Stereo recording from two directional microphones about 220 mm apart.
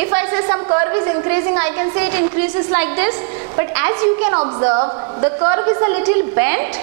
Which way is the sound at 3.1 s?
20° right (ahead or behind).